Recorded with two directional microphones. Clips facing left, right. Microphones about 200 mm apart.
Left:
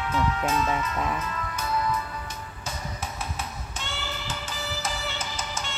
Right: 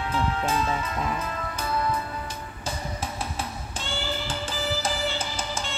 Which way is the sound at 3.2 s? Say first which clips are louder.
Right 2 dB; 30° right (ahead or behind).